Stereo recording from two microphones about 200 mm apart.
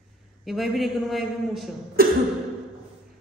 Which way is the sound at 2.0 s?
45° right (ahead or behind).